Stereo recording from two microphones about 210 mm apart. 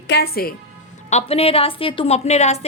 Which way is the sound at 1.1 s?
30° left (ahead or behind).